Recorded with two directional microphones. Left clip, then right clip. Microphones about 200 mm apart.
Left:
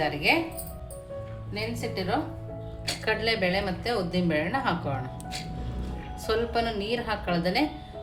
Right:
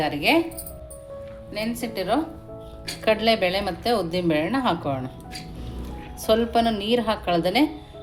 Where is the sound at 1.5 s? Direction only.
50° right (ahead or behind).